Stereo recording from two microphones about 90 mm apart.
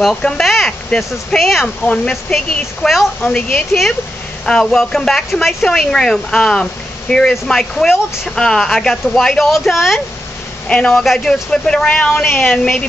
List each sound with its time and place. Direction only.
0.0 s a sound: 5° left (ahead or behind)
1.1 s speech: centre (ahead or behind)
12.3 s a woman's voice: 25° left (ahead or behind)
12.5 s speech: 10° left (ahead or behind)